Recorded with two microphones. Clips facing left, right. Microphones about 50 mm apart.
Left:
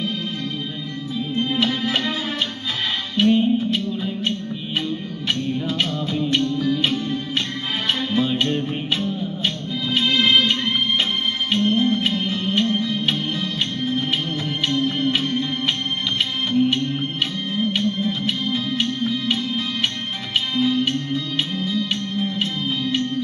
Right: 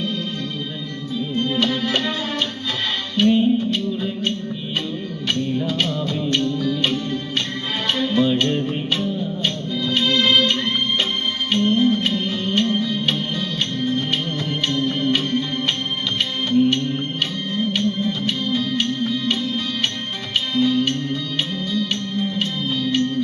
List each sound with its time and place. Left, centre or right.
1.4 s music: centre
3.2 s music: centre
7.9 s music: centre
9.4 s music: centre